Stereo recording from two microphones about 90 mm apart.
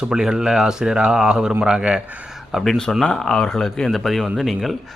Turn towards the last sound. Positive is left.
turn(degrees=0)  # may be behind; listen again after turning